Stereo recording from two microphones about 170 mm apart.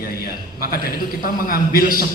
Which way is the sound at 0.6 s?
60° left (ahead or behind).